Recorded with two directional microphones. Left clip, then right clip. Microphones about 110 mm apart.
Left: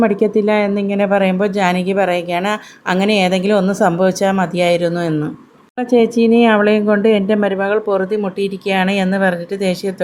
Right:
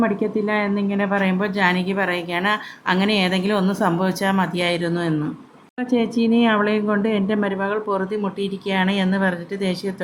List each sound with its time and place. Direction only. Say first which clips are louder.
0.0 s speech: left 7 dB; 40° left (ahead or behind)